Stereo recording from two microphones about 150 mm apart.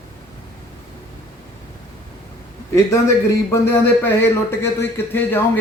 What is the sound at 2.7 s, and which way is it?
A man's voice, 20° left (ahead or behind).